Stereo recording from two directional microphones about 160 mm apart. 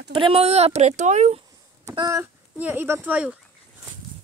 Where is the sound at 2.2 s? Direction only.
10° right (ahead or behind).